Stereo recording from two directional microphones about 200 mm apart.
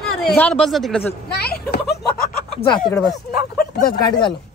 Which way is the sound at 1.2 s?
55° left (ahead or behind).